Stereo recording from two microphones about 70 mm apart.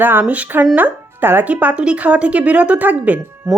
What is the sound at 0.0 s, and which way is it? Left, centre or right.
Speech, right.